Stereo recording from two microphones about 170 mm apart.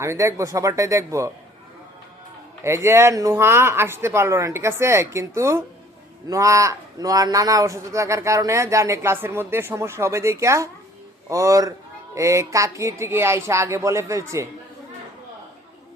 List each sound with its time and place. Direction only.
0.0 s a man's voice: 15° right (ahead or behind)
2.6 s a man's voice: 15° right (ahead or behind)